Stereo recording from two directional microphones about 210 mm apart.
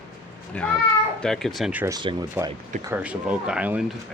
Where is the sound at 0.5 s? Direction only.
5° left (ahead or behind); by 2.0 s 10° right (ahead or behind).